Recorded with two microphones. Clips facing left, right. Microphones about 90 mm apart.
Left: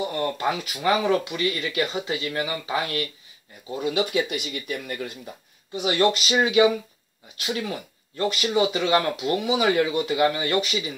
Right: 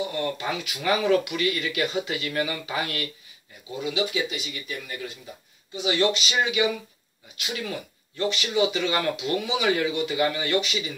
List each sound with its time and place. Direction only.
0.0 s speech: 40° left (ahead or behind)
0.8 s speech: 30° left (ahead or behind)
3.7 s speech: 45° left (ahead or behind)
5.9 s speech: 40° left (ahead or behind)